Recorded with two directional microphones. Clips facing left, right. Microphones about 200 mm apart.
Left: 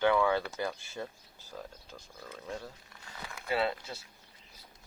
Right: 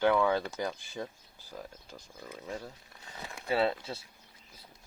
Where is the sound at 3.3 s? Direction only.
30° right (ahead or behind).